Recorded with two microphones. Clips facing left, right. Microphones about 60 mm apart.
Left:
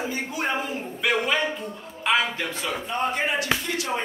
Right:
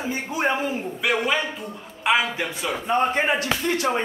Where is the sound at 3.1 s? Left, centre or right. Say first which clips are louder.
Right 3 dB; right.